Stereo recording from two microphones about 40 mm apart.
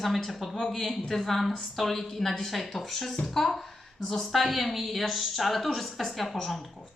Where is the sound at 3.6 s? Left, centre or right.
Centre.